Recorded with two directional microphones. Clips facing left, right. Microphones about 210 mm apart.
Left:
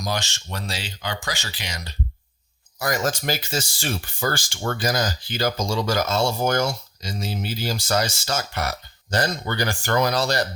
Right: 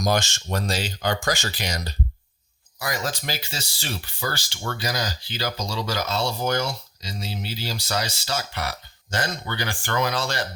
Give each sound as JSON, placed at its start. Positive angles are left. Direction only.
{"t": 0.0, "sound": "speech", "side_deg": -45}
{"t": 2.7, "sound": "speech", "side_deg": 45}